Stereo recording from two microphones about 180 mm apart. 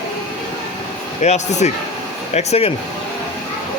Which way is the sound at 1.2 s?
40° left (ahead or behind).